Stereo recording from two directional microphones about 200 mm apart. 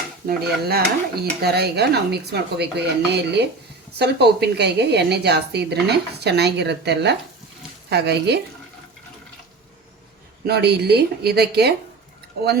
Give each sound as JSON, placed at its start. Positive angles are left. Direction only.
{"t": 0.3, "sound": "a woman's voice", "side_deg": -50}
{"t": 10.4, "sound": "a woman's voice", "side_deg": -55}